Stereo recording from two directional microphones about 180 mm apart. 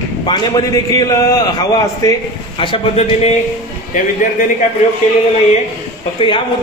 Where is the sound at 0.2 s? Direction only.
25° left (ahead or behind).